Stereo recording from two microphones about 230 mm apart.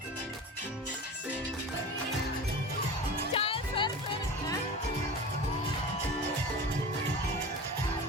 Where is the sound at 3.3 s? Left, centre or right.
Left.